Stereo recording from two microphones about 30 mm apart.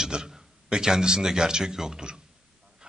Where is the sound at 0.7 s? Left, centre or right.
Right.